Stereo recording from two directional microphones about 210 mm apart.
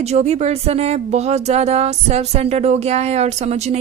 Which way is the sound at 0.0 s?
30° right (ahead or behind).